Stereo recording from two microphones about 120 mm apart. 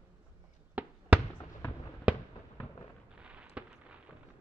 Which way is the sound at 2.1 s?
10° right (ahead or behind).